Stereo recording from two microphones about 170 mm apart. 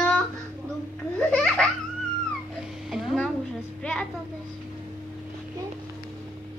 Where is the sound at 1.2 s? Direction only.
5° left (ahead or behind).